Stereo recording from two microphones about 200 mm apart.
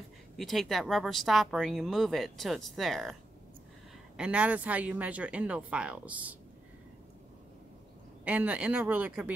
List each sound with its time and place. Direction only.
0.4 s speech: centre (ahead or behind)
4.2 s speech: 5° right (ahead or behind)
8.3 s speech: 5° right (ahead or behind)